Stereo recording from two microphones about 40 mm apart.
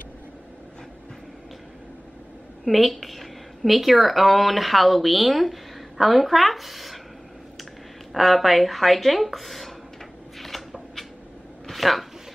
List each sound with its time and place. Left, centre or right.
2.6 s speech: centre
8.1 s speech: centre
11.6 s a sound: centre